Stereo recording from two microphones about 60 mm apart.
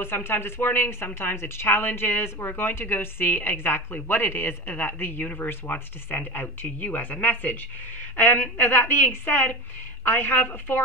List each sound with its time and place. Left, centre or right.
0.0 s speech: left